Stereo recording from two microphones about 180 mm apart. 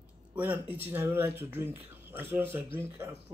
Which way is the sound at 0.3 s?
10° right (ahead or behind).